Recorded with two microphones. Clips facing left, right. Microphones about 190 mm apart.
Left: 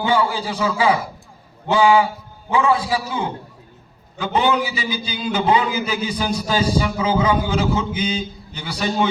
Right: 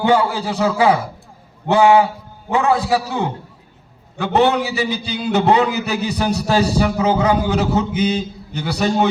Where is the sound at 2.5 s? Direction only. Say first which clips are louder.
Right 2 dB; 65° right (ahead or behind).